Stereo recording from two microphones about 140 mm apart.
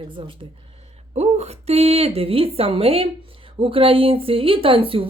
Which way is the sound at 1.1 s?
50° right (ahead or behind).